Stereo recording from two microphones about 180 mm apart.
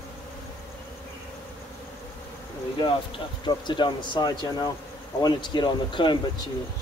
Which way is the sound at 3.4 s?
25° left (ahead or behind).